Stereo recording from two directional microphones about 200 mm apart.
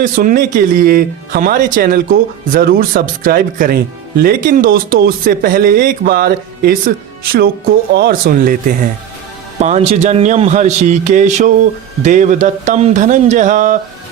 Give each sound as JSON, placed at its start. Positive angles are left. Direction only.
{"t": 0.0, "sound": "speech", "side_deg": -40}
{"t": 9.6, "sound": "a man's voice", "side_deg": -35}